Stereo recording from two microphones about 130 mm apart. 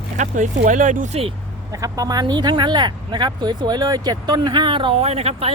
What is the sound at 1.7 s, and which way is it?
Speech, 25° right (ahead or behind).